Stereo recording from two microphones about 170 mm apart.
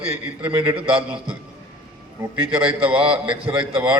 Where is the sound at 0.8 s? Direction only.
30° right (ahead or behind).